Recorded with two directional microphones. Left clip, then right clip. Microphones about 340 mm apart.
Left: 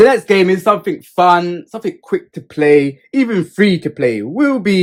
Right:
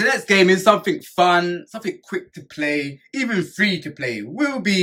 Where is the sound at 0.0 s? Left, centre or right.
Centre.